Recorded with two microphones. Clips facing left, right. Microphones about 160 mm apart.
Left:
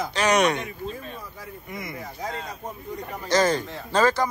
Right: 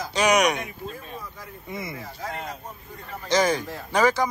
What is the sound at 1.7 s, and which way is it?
Speech, 25° right (ahead or behind).